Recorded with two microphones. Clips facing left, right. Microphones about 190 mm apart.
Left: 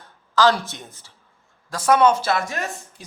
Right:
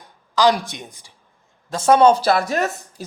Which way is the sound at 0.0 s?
15° right (ahead or behind).